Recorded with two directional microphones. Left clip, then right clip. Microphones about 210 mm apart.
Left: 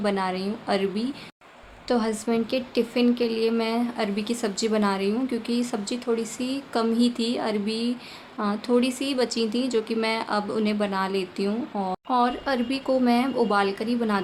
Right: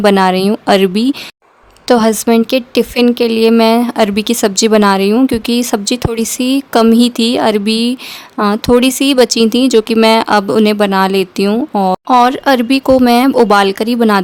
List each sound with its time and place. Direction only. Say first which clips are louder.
0.0 s speech: right 17 dB; 50° right (ahead or behind)